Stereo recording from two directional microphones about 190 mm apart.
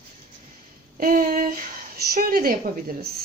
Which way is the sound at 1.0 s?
50° right (ahead or behind).